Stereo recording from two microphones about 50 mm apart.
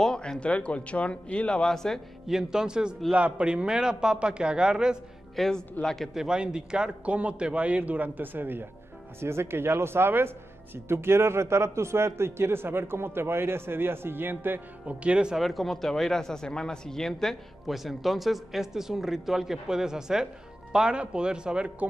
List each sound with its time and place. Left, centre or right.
0.0 s speech: centre
2.2 s a man's voice: centre
5.3 s speech: centre
6.1 s a man's voice: centre; by 8.6 s right
9.2 s a man's voice: right
14.9 s a man's voice: right
15.3 s speech: centre